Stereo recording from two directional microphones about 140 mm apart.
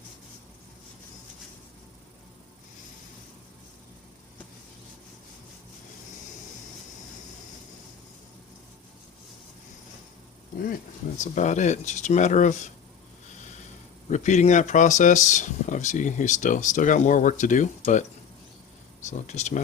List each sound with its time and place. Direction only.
11.2 s speech: 60° left (ahead or behind)
14.1 s speech: 55° left (ahead or behind)
19.0 s speech: 55° left (ahead or behind)